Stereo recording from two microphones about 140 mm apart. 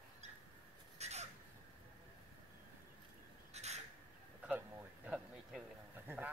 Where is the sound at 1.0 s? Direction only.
50° right (ahead or behind).